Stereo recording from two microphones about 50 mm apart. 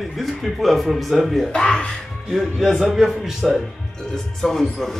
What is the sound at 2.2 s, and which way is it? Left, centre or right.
A man's voice, centre.